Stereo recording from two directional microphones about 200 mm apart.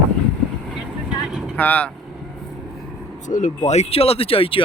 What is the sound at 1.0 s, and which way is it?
Vehicle, 5° right (ahead or behind).